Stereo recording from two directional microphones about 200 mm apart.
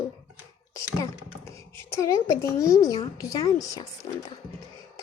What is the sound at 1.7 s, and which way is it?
A woman's voice, 15° left (ahead or behind).